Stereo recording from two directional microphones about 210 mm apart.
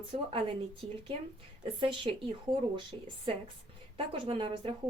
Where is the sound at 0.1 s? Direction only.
30° right (ahead or behind).